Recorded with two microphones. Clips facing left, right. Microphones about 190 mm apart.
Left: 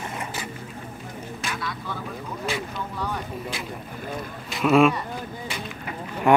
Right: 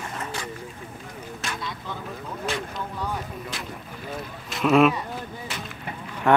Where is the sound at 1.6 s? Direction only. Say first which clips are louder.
Left 2 dB; 20° right (ahead or behind).